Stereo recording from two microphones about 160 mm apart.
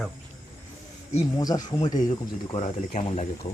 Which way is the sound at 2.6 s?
45° left (ahead or behind).